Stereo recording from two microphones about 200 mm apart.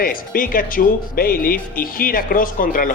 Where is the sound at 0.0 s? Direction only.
45° left (ahead or behind).